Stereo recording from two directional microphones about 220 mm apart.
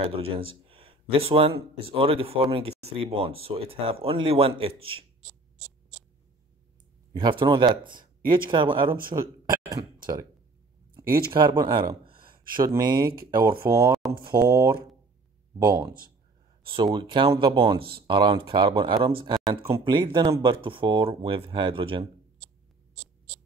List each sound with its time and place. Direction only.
0.0 s speech: 25° right (ahead or behind)
7.1 s speech: 20° right (ahead or behind)
11.3 s speech: 20° right (ahead or behind)
17.7 s speech: 45° right (ahead or behind)
18.0 s speech: 20° right (ahead or behind)